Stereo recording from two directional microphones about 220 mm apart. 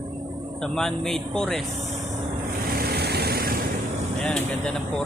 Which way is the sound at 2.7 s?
45° right (ahead or behind).